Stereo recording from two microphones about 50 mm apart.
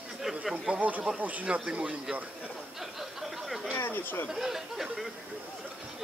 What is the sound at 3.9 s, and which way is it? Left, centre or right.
Speech, left.